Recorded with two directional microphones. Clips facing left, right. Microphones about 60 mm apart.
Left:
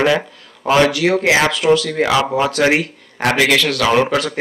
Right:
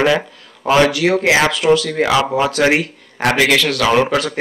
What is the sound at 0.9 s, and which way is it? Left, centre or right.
Speech, centre.